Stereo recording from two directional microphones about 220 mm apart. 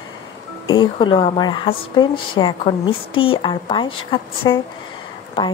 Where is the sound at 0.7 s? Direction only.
20° left (ahead or behind).